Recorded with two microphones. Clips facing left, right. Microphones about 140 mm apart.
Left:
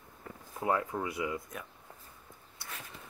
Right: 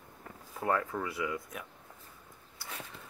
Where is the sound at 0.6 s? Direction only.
15° left (ahead or behind).